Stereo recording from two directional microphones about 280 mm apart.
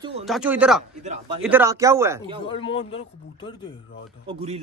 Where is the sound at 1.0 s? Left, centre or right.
Right.